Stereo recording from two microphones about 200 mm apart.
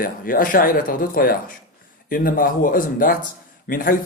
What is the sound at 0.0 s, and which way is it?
Speech, 45° left (ahead or behind).